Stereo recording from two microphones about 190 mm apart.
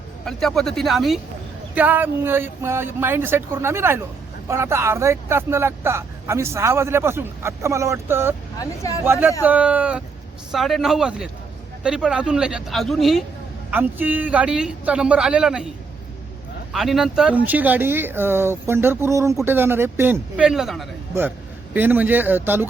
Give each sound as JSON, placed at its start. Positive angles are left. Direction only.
{"t": 0.3, "sound": "speech", "side_deg": 0}
{"t": 8.5, "sound": "speech", "side_deg": 15}
{"t": 9.0, "sound": "speech", "side_deg": -10}
{"t": 16.7, "sound": "a man's voice", "side_deg": 0}